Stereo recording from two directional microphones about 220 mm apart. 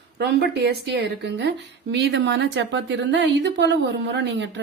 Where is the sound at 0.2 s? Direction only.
45° right (ahead or behind).